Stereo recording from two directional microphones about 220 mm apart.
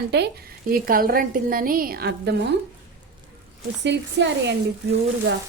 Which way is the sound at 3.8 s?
55° right (ahead or behind).